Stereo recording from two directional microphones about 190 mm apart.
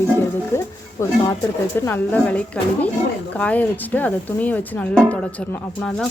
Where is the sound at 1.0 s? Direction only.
15° left (ahead or behind).